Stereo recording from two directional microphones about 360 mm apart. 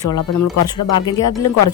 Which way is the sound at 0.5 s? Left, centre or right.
Left.